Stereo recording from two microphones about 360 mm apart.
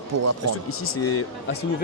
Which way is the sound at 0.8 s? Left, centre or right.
Left.